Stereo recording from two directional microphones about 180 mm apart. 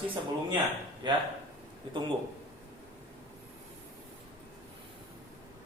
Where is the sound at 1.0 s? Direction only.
25° right (ahead or behind).